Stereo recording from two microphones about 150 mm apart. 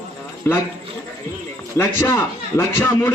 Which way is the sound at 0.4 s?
15° left (ahead or behind).